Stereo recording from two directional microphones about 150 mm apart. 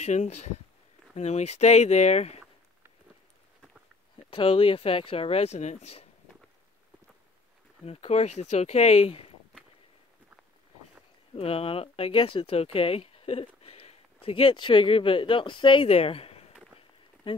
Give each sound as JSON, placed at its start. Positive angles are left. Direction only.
{"t": 0.0, "sound": "speech", "side_deg": 50}
{"t": 4.3, "sound": "speech", "side_deg": 35}
{"t": 7.8, "sound": "speech", "side_deg": 40}
{"t": 11.3, "sound": "speech", "side_deg": 40}